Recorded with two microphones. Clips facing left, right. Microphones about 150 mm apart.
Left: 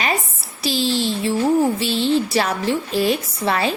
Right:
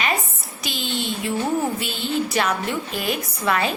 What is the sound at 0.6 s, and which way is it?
A woman's voice, 35° left (ahead or behind).